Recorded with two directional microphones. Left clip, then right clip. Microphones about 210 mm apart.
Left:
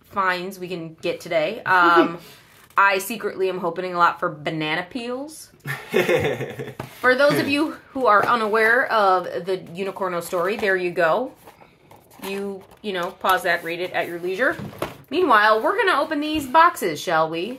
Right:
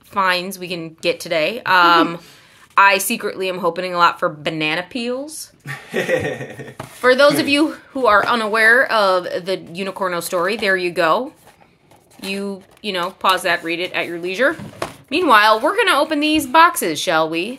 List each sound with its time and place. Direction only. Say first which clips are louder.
0.1 s speech: right 5 dB; 40° right (ahead or behind)
5.9 s a sound: even; 40° left (ahead or behind)
7.0 s speech: right 4 dB; 40° right (ahead or behind)